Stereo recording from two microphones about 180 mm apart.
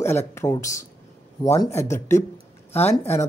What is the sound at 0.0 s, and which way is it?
A man's voice, 15° left (ahead or behind).